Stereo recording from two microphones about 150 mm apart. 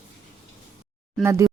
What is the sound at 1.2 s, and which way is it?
Speech, 20° right (ahead or behind).